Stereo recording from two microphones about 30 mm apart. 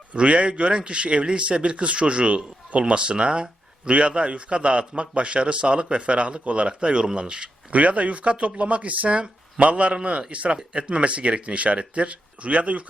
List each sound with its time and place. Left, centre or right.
0.2 s a man's voice: right
7.7 s speech: right
9.0 s speech: right